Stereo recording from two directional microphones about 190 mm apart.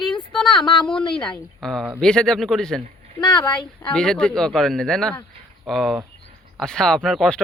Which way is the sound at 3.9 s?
5° left (ahead or behind).